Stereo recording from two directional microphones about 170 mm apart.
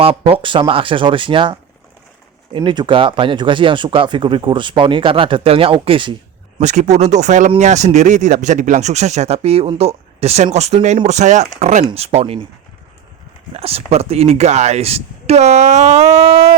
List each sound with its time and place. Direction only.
0.0 s speech: 35° right (ahead or behind)
6.6 s speech: 45° right (ahead or behind)
13.5 s speech: 35° right (ahead or behind)